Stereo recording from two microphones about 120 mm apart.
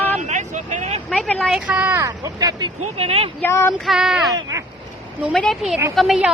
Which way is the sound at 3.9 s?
5° right (ahead or behind).